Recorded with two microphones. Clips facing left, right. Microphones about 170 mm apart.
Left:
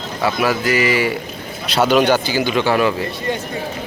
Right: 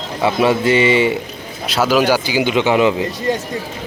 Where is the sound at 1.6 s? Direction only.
Centre (ahead or behind); by 3.1 s 20° right (ahead or behind).